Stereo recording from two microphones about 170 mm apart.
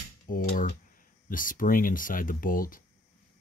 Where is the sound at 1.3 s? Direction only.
55° left (ahead or behind).